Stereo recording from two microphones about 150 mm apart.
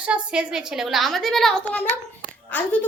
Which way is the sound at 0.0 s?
5° right (ahead or behind).